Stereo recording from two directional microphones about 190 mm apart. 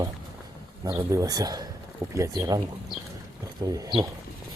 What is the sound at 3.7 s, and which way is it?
Speech, 20° right (ahead or behind).